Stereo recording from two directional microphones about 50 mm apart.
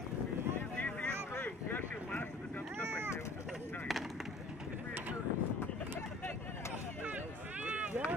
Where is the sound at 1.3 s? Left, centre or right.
Left.